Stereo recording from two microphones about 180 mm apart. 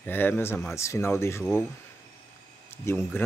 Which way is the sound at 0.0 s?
10° left (ahead or behind).